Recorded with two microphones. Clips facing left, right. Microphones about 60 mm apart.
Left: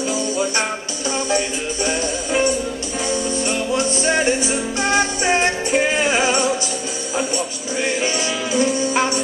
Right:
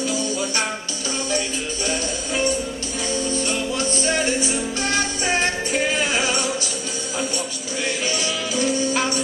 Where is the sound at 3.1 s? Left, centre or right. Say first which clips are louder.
Left 2 dB; left.